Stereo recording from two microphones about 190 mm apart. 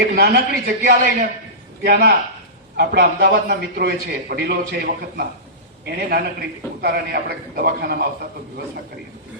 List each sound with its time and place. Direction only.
0.0 s a man's voice: 60° right (ahead or behind)